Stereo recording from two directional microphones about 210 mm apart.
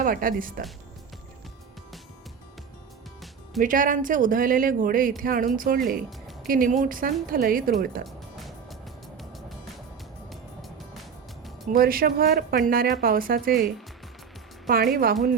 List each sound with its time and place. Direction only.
0.0 s speech: 40° right (ahead or behind)
3.6 s speech: 40° right (ahead or behind)
6.1 s music: centre (ahead or behind)
6.5 s speech: 40° right (ahead or behind)
8.0 s music: centre (ahead or behind)
10.2 s music: centre (ahead or behind)
11.7 s speech: 45° right (ahead or behind)
14.7 s speech: 45° right (ahead or behind)